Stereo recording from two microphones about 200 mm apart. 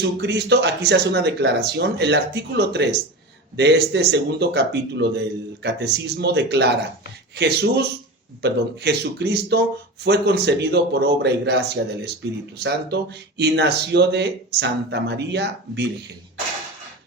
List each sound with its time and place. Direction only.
0.2 s speech: 60° right (ahead or behind)